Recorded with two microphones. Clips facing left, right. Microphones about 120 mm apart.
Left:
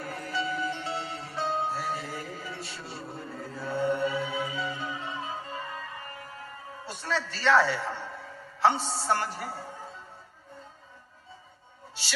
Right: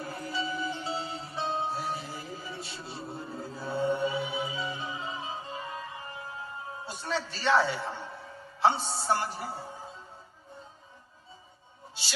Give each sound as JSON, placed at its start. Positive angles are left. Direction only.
{"t": 0.0, "sound": "music", "side_deg": -20}
{"t": 9.1, "sound": "a woman's voice", "side_deg": -20}